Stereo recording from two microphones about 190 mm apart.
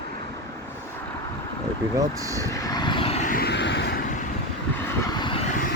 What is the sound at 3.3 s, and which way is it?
Vehicle, 55° left (ahead or behind).